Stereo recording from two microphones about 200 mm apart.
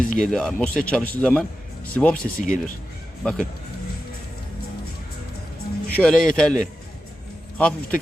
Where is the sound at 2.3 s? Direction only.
45° left (ahead or behind).